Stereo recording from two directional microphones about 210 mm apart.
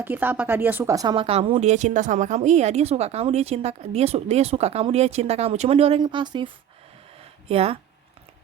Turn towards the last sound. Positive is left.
turn(degrees=-30)  # may be behind; listen again after turning